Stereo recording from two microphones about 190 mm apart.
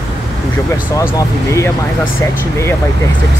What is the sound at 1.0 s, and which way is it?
Speech, 15° left (ahead or behind).